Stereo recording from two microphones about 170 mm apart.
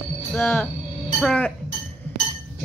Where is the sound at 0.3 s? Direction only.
10° left (ahead or behind).